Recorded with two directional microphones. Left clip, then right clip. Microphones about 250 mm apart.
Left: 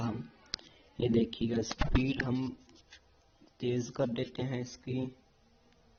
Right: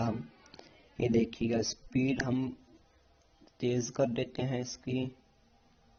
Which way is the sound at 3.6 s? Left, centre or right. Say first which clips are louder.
Right 2 dB; centre.